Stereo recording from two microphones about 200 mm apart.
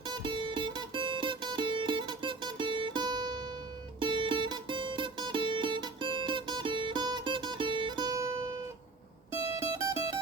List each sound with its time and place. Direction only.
0.0 s music: 25° right (ahead or behind)
9.7 s music: 15° right (ahead or behind)